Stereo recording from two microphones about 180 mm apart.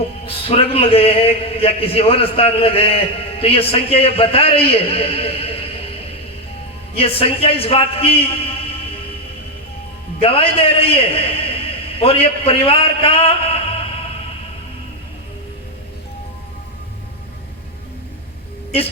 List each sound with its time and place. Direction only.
0.3 s a man's voice: 30° left (ahead or behind)
10.2 s a man's voice: 30° left (ahead or behind)